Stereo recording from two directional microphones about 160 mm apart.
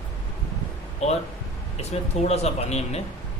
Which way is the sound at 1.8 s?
40° left (ahead or behind).